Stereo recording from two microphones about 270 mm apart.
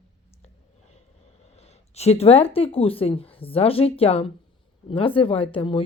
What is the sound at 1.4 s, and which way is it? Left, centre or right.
Speech, left.